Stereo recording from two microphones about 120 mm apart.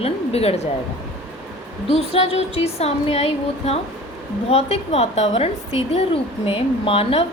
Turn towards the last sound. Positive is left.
turn(degrees=50)  # may be behind; listen again after turning